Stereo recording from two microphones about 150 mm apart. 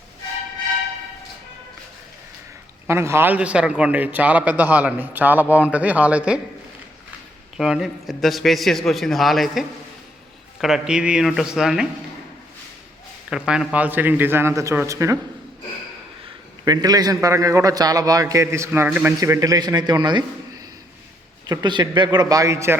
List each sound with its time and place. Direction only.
2.8 s a man's voice: 15° right (ahead or behind)
7.5 s a man's voice: 5° right (ahead or behind)
13.3 s a man's voice: 5° right (ahead or behind)
16.6 s a man's voice: 25° right (ahead or behind)
19.2 s a man's voice: 20° right (ahead or behind)
21.4 s a man's voice: 30° right (ahead or behind)